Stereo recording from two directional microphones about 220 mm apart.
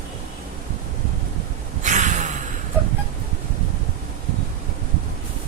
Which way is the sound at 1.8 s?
35° right (ahead or behind).